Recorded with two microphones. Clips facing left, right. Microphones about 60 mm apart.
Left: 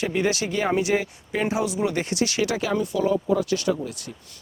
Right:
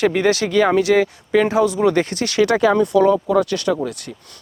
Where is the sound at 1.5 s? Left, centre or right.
Right.